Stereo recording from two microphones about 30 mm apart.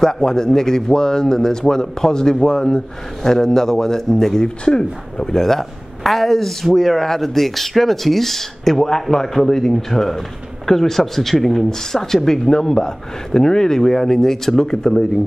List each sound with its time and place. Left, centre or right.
0.0 s speech: centre